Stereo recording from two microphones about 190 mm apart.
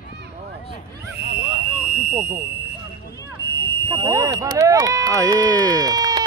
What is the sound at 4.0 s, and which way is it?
Speech, 20° right (ahead or behind).